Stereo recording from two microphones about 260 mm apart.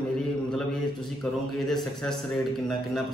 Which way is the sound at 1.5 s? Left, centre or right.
Centre.